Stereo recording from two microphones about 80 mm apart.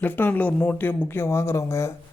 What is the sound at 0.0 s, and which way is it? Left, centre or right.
Speech, left.